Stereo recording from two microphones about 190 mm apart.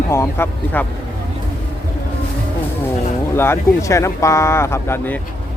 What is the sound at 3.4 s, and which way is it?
Speech, 15° left (ahead or behind).